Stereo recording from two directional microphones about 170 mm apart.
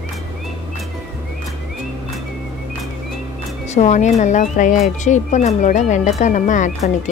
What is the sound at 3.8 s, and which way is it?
Speech, 45° left (ahead or behind).